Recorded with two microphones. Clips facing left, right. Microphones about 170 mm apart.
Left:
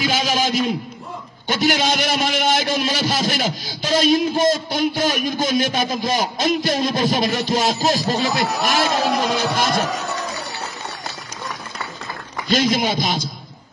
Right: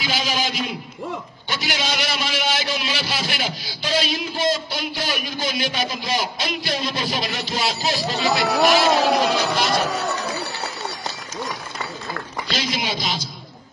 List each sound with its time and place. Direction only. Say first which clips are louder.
0.0 s a man's voice: left 4 dB; 45° left (ahead or behind)
12.4 s a man's voice: left 9 dB; 50° left (ahead or behind)